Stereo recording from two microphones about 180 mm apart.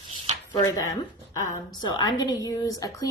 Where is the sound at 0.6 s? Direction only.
20° left (ahead or behind).